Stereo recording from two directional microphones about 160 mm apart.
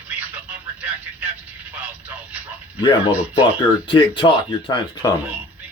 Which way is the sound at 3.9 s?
30° left (ahead or behind).